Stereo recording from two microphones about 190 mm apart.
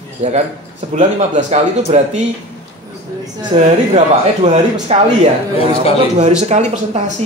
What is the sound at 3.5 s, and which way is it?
Speech, 35° right (ahead or behind).